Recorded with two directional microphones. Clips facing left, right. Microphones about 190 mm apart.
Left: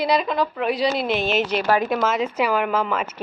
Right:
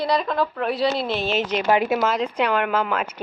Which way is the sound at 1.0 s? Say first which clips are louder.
Left 2 dB; 15° left (ahead or behind).